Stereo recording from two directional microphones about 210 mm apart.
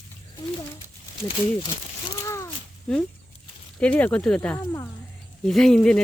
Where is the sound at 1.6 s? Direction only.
20° left (ahead or behind).